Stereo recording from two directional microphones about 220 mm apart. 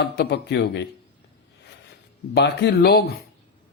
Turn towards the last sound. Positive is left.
turn(degrees=45)  # may be behind; listen again after turning